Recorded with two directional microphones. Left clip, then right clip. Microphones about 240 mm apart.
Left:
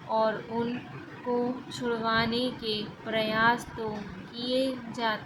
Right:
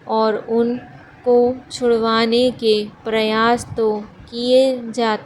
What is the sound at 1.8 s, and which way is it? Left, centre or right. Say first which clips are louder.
A woman's voice: right 12 dB; right.